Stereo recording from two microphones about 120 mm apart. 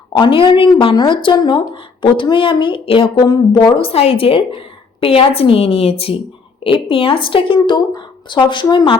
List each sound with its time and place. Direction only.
0.2 s a woman's voice: 45° left (ahead or behind)
3.2 s a woman's voice: 35° left (ahead or behind)